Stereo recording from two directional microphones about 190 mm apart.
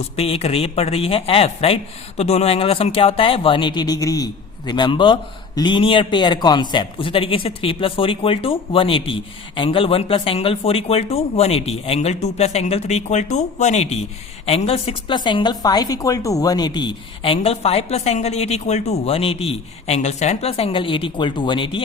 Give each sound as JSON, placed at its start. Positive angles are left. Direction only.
{"t": 0.2, "sound": "speech", "side_deg": 30}